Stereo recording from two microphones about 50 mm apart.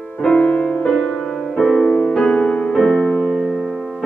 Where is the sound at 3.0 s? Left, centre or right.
Centre.